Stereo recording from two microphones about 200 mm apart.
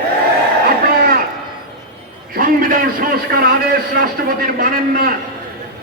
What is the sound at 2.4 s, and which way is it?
A man's voice, 45° right (ahead or behind).